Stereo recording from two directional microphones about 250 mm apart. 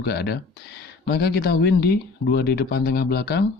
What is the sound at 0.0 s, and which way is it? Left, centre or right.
Speech, left.